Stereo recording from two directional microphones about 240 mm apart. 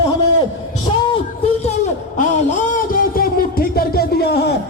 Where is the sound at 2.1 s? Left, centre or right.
Left.